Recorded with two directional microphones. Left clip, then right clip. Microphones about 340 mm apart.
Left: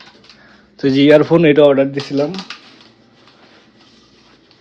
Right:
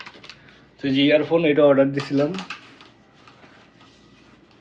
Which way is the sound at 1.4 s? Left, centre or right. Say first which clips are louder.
Left 6 dB; left.